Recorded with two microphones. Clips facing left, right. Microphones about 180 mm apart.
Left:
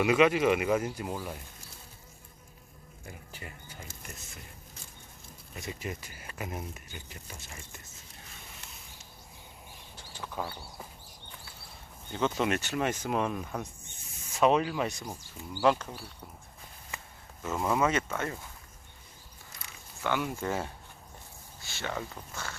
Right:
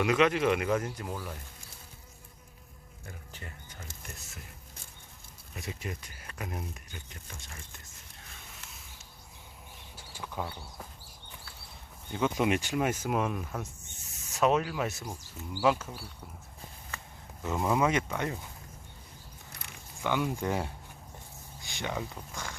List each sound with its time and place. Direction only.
0.0 s speech: 5° left (ahead or behind)
3.1 s a sound: 10° left (ahead or behind)
5.5 s speech: centre (ahead or behind)
9.9 s a sound: 10° right (ahead or behind)
10.4 s speech: 5° left (ahead or behind)
12.1 s speech: 10° right (ahead or behind)
17.6 s speech: 10° right (ahead or behind)
19.5 s a sound: 65° right (ahead or behind)
20.0 s speech: 15° right (ahead or behind)